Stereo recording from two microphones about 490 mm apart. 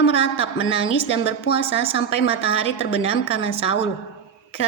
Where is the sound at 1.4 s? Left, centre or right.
Centre.